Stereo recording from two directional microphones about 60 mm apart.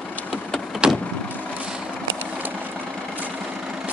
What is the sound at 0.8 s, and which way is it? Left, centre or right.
Vehicle, centre.